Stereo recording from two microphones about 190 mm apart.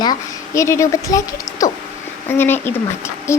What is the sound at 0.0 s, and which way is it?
A woman's voice, 20° left (ahead or behind).